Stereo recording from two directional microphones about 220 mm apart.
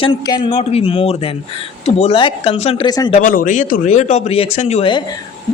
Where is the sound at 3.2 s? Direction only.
40° left (ahead or behind).